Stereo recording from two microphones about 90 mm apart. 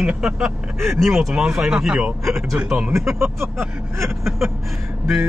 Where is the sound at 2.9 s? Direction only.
30° right (ahead or behind).